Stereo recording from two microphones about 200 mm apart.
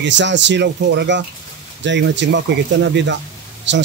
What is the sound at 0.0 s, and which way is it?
Speech, 65° right (ahead or behind).